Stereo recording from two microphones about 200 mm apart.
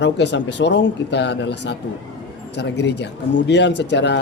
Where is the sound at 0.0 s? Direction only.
60° left (ahead or behind).